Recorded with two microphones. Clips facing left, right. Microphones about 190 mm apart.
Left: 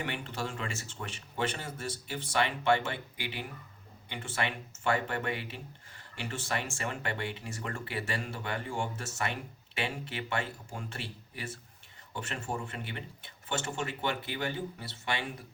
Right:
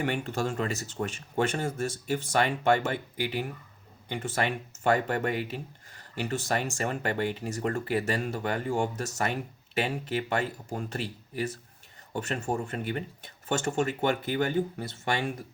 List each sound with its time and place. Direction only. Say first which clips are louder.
0.0 s speech: right 7 dB; 45° right (ahead or behind)